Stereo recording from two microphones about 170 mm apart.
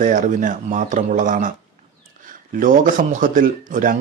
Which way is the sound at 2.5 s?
50° right (ahead or behind).